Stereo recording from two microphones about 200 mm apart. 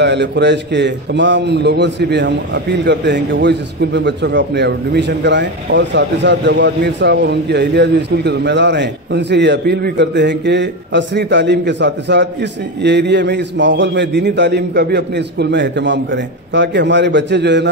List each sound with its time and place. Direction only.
0.0 s a man's voice: 60° right (ahead or behind)